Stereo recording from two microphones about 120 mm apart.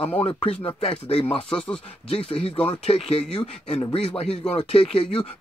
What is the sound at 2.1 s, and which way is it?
Speech, 55° left (ahead or behind).